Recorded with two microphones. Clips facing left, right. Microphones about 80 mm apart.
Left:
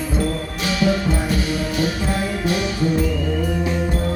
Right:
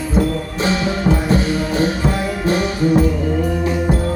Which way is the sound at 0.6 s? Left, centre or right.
Right.